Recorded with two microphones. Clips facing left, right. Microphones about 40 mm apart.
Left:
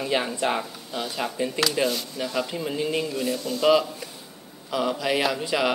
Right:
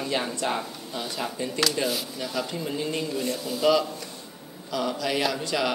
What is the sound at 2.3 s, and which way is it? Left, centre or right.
A man's voice, centre.